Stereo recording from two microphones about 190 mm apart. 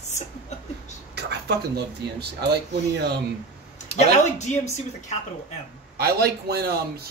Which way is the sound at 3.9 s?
35° left (ahead or behind).